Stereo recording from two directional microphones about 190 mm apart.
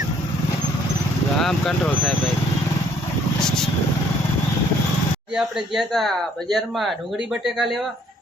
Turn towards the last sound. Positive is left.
turn(degrees=0)  # may be behind; listen again after turning